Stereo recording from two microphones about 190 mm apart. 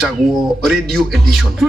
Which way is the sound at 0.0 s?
Centre (ahead or behind).